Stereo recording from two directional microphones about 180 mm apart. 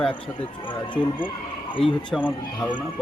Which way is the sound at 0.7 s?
25° left (ahead or behind).